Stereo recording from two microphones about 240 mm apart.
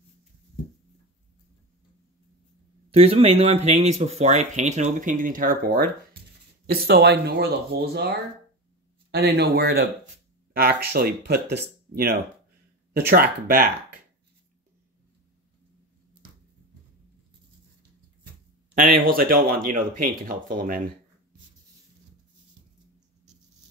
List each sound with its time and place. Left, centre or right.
2.9 s speech: right
9.1 s speech: right
18.8 s speech: right